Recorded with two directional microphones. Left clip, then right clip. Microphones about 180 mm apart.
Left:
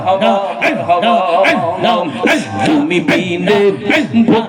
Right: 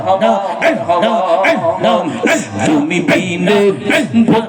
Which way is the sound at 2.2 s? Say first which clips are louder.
Left 1 dB; 25° right (ahead or behind).